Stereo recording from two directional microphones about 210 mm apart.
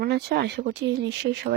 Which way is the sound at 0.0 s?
50° right (ahead or behind).